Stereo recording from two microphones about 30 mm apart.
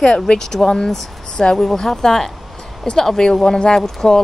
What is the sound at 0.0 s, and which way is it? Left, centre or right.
Speech, left.